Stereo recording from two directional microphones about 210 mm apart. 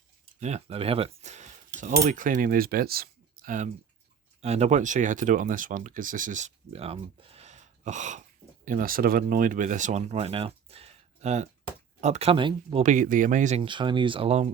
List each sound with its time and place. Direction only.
0.3 s speech: 35° right (ahead or behind)
12.8 s speech: 35° right (ahead or behind)
13.6 s speech: 25° right (ahead or behind)